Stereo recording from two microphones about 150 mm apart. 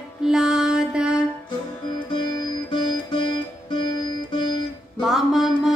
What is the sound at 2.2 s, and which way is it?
Music, 30° left (ahead or behind).